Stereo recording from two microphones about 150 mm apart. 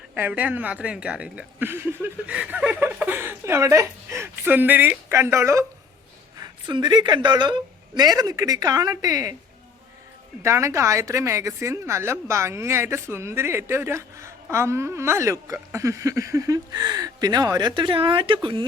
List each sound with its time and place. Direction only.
0.1 s a woman's voice: 10° right (ahead or behind)
10.4 s a woman's voice: 20° right (ahead or behind); by 18.6 s 35° right (ahead or behind)